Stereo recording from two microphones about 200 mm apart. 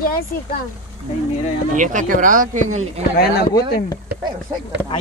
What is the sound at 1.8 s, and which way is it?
Speech, 40° right (ahead or behind).